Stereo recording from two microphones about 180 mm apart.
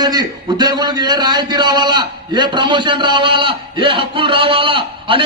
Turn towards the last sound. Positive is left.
turn(degrees=-30)  # may be behind; listen again after turning